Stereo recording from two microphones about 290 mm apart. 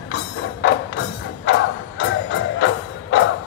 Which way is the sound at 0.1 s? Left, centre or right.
Left.